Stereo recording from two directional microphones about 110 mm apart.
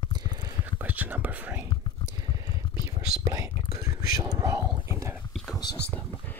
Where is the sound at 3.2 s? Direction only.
30° right (ahead or behind).